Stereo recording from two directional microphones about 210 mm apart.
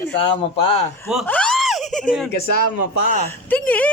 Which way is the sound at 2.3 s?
50° left (ahead or behind).